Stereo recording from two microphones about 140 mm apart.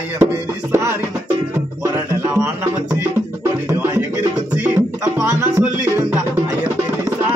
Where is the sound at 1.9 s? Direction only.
25° right (ahead or behind).